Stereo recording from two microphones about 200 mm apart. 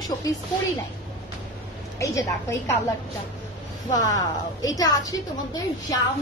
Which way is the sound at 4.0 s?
20° left (ahead or behind).